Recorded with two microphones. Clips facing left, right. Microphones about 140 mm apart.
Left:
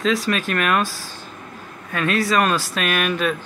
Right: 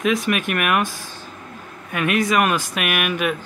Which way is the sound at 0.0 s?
20° right (ahead or behind).